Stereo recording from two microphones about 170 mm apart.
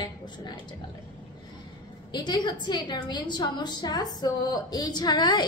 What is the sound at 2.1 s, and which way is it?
A woman's voice, 25° left (ahead or behind).